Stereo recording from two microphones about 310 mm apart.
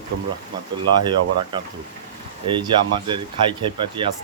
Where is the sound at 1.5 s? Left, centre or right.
Centre.